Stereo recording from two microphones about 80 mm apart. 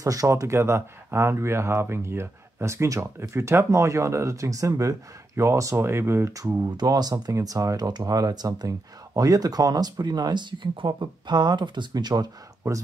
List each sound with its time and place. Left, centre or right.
0.0 s speech: right
6.3 s speech: right
7.3 s speech: right